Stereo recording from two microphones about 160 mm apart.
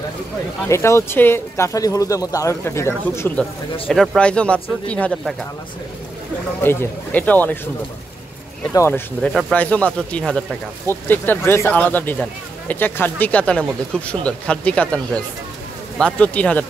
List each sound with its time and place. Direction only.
0.7 s speech: 20° left (ahead or behind)
3.9 s speech: centre (ahead or behind)
6.6 s speech: 15° left (ahead or behind)
8.7 s speech: 15° left (ahead or behind)